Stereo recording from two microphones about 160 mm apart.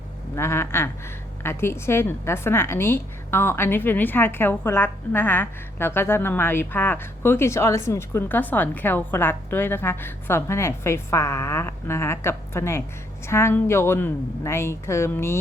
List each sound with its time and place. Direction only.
0.3 s a woman's voice: 15° left (ahead or behind)